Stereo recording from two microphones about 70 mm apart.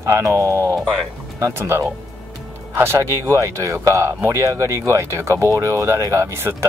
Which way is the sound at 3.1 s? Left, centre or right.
Right.